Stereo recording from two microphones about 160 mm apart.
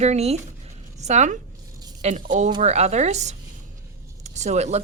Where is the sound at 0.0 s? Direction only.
45° right (ahead or behind).